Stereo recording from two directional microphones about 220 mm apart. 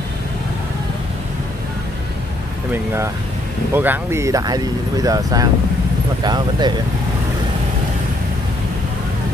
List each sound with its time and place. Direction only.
2.7 s speech: 10° right (ahead or behind)